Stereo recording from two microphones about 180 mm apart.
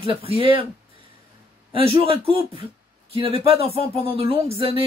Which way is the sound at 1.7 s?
30° right (ahead or behind).